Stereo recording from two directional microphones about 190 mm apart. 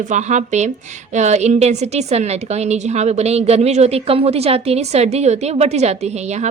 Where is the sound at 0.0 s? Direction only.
40° right (ahead or behind).